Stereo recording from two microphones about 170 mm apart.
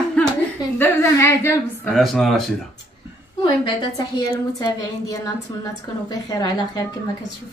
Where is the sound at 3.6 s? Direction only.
25° left (ahead or behind).